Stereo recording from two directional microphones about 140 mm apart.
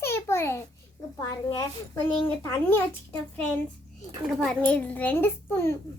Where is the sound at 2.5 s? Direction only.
15° left (ahead or behind).